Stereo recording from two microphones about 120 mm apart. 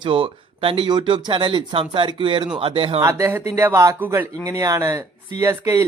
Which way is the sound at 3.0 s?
25° right (ahead or behind).